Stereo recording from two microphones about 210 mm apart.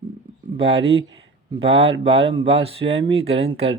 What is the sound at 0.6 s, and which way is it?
Speech, 25° right (ahead or behind).